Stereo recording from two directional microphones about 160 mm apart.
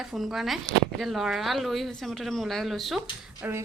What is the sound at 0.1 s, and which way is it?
Speech, centre (ahead or behind).